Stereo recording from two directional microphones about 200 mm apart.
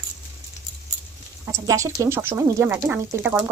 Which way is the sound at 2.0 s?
10° right (ahead or behind).